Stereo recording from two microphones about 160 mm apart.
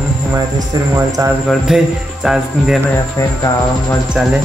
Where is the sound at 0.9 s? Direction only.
15° right (ahead or behind).